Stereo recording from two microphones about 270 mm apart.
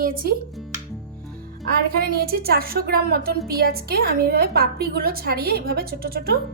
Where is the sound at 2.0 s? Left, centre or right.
Right.